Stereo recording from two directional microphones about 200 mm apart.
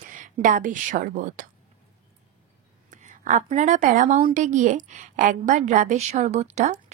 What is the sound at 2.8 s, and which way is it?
A woman's voice, 40° right (ahead or behind).